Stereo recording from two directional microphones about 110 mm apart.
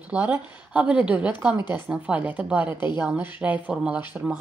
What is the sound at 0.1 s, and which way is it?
Speech, 15° right (ahead or behind).